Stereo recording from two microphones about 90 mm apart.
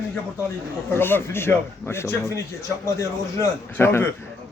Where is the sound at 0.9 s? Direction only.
25° left (ahead or behind).